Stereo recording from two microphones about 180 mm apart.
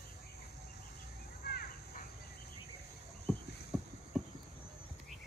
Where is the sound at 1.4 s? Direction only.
55° left (ahead or behind).